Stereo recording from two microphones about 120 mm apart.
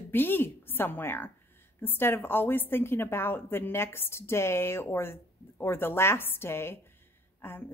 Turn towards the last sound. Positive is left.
turn(degrees=20)  # may be behind; listen again after turning